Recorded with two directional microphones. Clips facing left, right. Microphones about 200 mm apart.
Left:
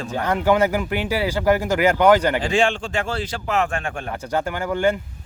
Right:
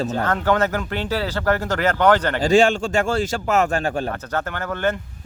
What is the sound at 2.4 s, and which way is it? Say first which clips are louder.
A man's voice: right 4 dB; 40° right (ahead or behind).